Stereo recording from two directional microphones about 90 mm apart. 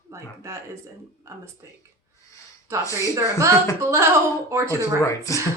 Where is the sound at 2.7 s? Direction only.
30° right (ahead or behind).